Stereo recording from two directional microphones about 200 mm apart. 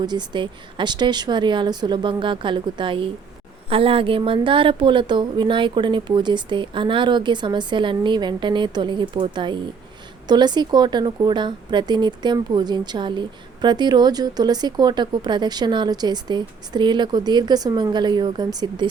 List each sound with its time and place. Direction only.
0.0 s speech: 20° right (ahead or behind)